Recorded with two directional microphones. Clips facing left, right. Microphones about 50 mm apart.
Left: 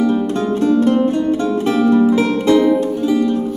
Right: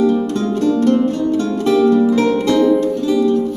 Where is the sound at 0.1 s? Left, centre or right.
Centre.